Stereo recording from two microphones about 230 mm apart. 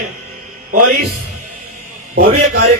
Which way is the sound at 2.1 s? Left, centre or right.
Right.